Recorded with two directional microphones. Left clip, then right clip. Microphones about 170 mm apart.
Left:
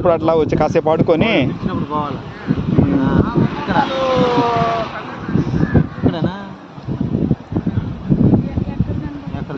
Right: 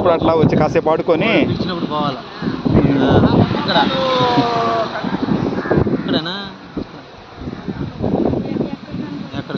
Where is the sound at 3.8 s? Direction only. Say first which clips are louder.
Even; 45° right (ahead or behind); by 4.9 s 65° right (ahead or behind).